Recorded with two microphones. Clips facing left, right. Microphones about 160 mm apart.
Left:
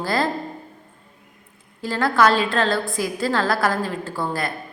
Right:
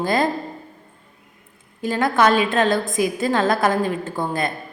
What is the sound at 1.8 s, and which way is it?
A woman's voice, 20° right (ahead or behind).